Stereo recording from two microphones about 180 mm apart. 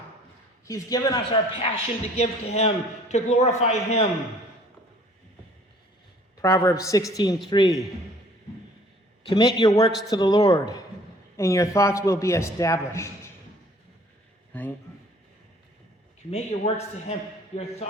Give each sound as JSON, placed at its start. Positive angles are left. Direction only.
{"t": 0.7, "sound": "speech", "side_deg": 20}
{"t": 1.6, "sound": "a man's voice", "side_deg": 35}
{"t": 6.3, "sound": "a man's voice", "side_deg": 15}
{"t": 9.6, "sound": "a man's voice", "side_deg": 20}
{"t": 14.5, "sound": "a man's voice", "side_deg": 10}
{"t": 16.3, "sound": "a man's voice", "side_deg": 35}